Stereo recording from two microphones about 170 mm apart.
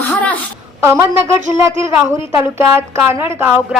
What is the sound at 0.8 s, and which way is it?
A woman's voice, 15° right (ahead or behind).